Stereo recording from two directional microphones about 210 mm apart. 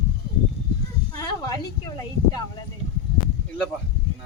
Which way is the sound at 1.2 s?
15° left (ahead or behind).